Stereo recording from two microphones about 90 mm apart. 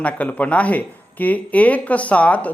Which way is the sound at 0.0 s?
15° left (ahead or behind).